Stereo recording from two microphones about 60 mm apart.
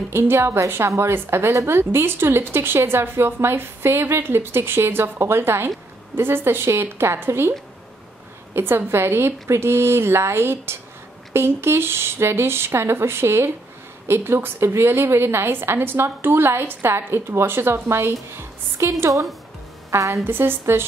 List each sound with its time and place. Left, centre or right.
0.1 s a woman's voice: right
8.5 s a woman's voice: right
20.2 s a woman's voice: right